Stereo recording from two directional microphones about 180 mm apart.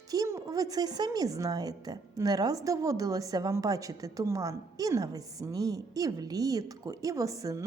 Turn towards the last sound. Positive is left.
turn(degrees=-20)  # may be behind; listen again after turning